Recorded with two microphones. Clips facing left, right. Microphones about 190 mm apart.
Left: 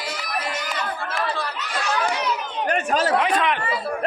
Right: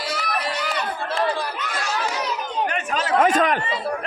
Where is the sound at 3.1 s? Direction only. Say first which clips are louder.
Right 3 dB; 45° right (ahead or behind).